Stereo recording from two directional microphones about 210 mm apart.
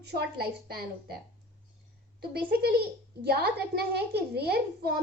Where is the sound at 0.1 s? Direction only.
50° right (ahead or behind).